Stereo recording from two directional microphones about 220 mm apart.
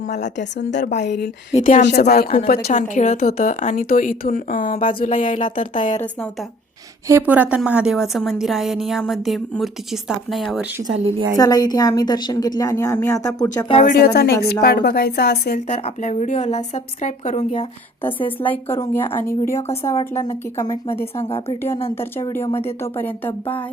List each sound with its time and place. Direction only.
0.3 s a woman's voice: 50° left (ahead or behind)
1.5 s a woman's voice: 35° left (ahead or behind)
1.8 s a woman's voice: 50° left (ahead or behind)
2.0 s a woman's voice: 30° left (ahead or behind)
2.5 s a woman's voice: 45° left (ahead or behind)
7.1 s a woman's voice: 10° right (ahead or behind)
11.0 s a woman's voice: 25° right (ahead or behind)
11.3 s a woman's voice: 15° left (ahead or behind)
14.0 s a woman's voice: 45° left (ahead or behind)
15.7 s a woman's voice: 30° left (ahead or behind)
18.3 s a woman's voice: 10° left (ahead or behind)
21.2 s a woman's voice: 25° left (ahead or behind)
21.9 s a woman's voice: 10° left (ahead or behind)